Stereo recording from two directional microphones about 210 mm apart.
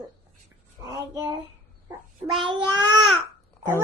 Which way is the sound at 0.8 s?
15° right (ahead or behind).